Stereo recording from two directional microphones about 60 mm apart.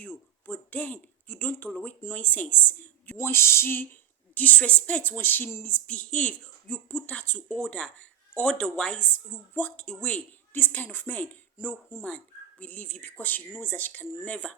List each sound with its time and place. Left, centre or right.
0.4 s speech: left
3.2 s a sound: left
4.4 s speech: left
5.1 s speech: left
5.6 s speech: left
9.0 s speech: left
10.5 s speech: left